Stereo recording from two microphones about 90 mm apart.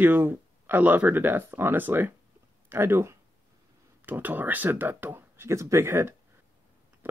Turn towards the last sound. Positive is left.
turn(degrees=-30)  # may be behind; listen again after turning